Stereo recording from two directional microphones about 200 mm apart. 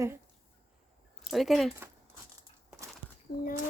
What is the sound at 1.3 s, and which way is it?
Speech, centre (ahead or behind).